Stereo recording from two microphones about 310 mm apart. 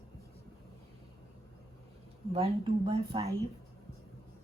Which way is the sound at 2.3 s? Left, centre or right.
Centre.